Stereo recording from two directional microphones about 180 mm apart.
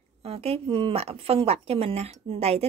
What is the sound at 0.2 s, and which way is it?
A woman's voice, 35° right (ahead or behind).